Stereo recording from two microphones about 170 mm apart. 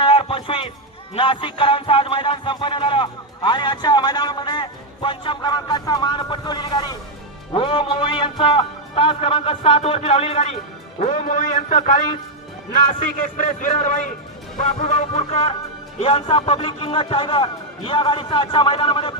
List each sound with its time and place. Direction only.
0.0 s music: 30° left (ahead or behind)
7.5 s a man's voice: 30° left (ahead or behind)